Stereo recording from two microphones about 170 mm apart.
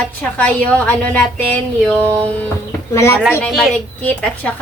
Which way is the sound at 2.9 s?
15° left (ahead or behind).